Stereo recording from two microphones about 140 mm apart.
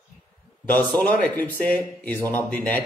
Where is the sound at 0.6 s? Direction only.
10° left (ahead or behind).